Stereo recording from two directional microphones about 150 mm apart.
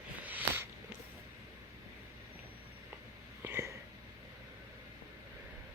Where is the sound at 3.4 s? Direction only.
15° right (ahead or behind).